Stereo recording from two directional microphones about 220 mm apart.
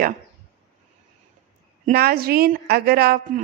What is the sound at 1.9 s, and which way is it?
A woman's voice, 45° right (ahead or behind).